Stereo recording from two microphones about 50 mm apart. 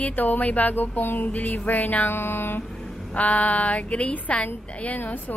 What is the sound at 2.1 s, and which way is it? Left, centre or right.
Music, left.